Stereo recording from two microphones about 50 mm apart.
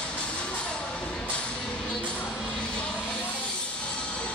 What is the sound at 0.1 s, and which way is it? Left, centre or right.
Music, left.